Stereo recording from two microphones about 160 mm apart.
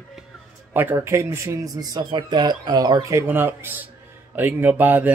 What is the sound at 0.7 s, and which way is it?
Speech, 15° right (ahead or behind).